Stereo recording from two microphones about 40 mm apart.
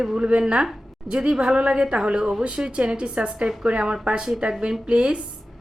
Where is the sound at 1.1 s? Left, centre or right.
Centre.